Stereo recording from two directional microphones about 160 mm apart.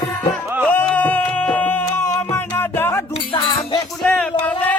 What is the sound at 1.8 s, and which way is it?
Music, 15° left (ahead or behind).